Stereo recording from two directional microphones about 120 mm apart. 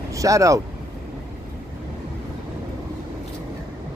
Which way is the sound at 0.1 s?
25° right (ahead or behind).